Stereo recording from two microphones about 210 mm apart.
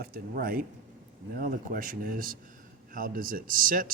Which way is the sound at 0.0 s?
45° right (ahead or behind).